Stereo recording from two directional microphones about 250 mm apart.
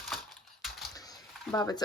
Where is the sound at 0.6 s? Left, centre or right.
Centre.